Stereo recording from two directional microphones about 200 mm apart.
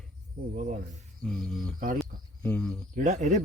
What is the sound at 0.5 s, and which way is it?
Speech, 40° right (ahead or behind).